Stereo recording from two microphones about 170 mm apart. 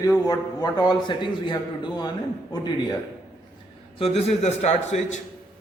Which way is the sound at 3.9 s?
35° left (ahead or behind).